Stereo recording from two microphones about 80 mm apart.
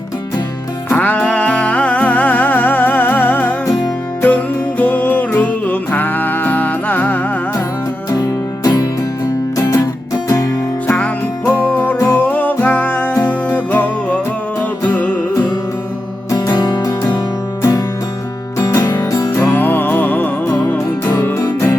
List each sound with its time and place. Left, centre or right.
0.9 s music: left
8.1 s music: left
9.6 s music: left
10.8 s music: left
16.3 s music: left
19.3 s music: left